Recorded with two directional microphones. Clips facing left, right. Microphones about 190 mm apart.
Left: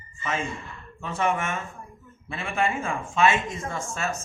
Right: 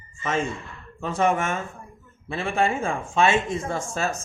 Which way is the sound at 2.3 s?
30° right (ahead or behind).